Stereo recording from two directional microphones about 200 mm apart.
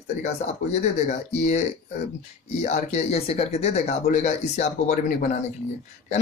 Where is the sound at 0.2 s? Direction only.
35° left (ahead or behind).